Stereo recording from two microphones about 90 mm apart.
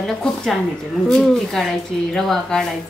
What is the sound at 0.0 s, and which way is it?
A woman's voice, 5° left (ahead or behind).